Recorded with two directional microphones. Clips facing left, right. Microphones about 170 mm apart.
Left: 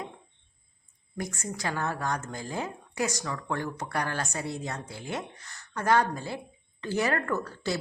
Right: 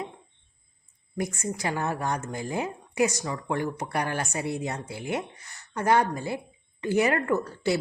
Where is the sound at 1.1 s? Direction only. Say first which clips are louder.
Right 5 dB; 15° right (ahead or behind).